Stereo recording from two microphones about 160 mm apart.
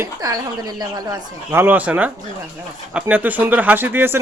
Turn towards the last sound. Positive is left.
turn(degrees=-15)  # may be behind; listen again after turning